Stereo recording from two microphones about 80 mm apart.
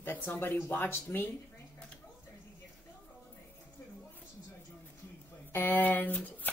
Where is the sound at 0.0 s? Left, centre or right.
Left.